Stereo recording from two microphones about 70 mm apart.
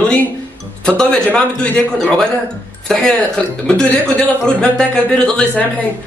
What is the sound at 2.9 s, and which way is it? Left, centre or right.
A man's voice, centre.